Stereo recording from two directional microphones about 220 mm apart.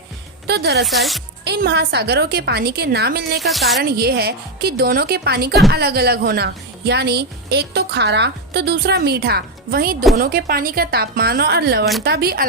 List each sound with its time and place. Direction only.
0.4 s a woman's voice: 50° right (ahead or behind)
0.9 s a woman's voice: centre (ahead or behind)
1.5 s a woman's voice: 50° right (ahead or behind)
3.4 s a woman's voice: centre (ahead or behind)
3.8 s a woman's voice: 45° right (ahead or behind)